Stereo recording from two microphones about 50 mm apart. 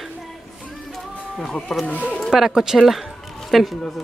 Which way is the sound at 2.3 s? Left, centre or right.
Centre.